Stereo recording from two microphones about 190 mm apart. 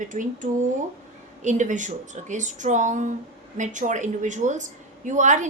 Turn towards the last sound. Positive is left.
turn(degrees=-40)  # may be behind; listen again after turning